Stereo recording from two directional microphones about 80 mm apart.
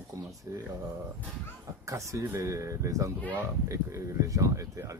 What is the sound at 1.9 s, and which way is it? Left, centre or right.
Speech, right.